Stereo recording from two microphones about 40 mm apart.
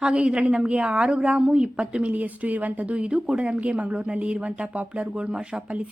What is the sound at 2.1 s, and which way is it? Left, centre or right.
Speech, right.